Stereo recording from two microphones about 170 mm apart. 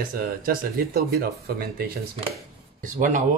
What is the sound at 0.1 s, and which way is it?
Speech, 60° right (ahead or behind).